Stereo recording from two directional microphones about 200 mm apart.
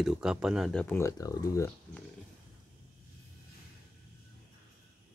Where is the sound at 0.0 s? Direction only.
5° right (ahead or behind); by 1.7 s 15° left (ahead or behind).